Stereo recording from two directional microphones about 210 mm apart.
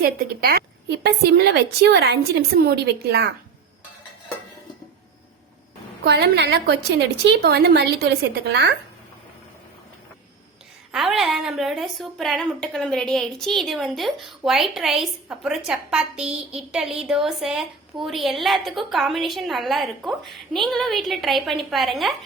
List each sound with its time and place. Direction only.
0.0 s a woman's voice: 45° right (ahead or behind)
6.1 s a woman's voice: 50° right (ahead or behind)
10.9 s a woman's voice: centre (ahead or behind)